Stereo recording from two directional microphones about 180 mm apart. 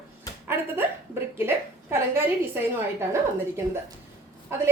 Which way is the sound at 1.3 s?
15° right (ahead or behind).